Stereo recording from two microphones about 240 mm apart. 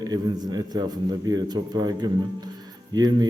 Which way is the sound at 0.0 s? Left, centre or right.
Centre.